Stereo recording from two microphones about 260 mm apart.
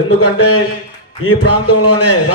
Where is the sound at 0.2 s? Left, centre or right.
Left.